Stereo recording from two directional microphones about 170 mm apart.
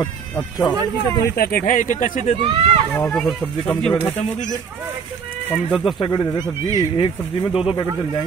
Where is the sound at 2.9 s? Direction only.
5° left (ahead or behind).